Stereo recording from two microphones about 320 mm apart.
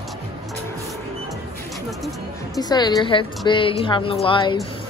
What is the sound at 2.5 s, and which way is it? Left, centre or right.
A woman's voice, centre.